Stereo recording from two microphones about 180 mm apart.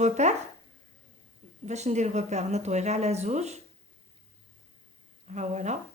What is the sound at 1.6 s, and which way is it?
A woman's voice, 40° right (ahead or behind).